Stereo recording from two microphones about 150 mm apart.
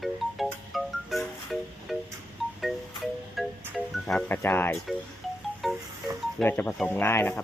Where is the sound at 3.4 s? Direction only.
Centre (ahead or behind).